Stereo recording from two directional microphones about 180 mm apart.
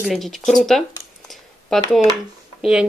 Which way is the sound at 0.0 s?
Centre (ahead or behind).